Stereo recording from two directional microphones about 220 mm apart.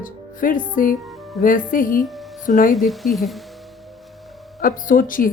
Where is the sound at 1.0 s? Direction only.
Centre (ahead or behind).